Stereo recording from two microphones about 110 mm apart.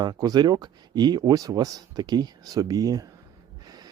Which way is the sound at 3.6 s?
35° right (ahead or behind).